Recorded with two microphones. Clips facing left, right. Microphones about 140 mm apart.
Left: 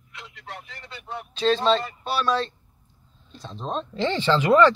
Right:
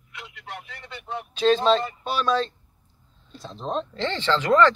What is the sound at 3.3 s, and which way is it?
Speech, 5° right (ahead or behind).